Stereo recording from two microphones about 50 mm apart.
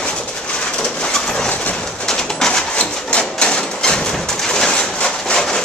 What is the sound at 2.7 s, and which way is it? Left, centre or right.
Printer, left.